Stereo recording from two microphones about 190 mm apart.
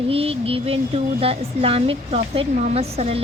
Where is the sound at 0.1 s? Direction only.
30° right (ahead or behind).